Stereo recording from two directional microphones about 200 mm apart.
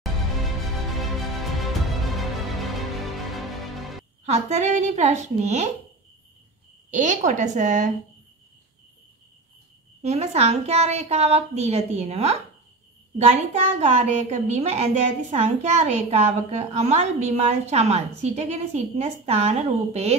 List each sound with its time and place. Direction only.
1.4 s music: centre (ahead or behind)
4.3 s a woman's voice: 35° right (ahead or behind)
6.9 s a woman's voice: 40° right (ahead or behind)
10.0 s a woman's voice: 30° right (ahead or behind)